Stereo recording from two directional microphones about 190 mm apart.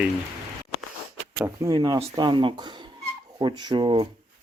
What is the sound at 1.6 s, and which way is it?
Speech, 20° right (ahead or behind).